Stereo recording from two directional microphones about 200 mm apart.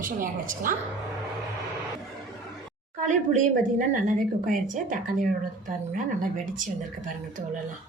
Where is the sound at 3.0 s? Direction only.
40° right (ahead or behind).